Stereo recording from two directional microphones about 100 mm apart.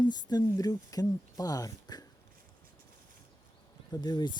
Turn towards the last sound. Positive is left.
turn(degrees=45)  # may be behind; listen again after turning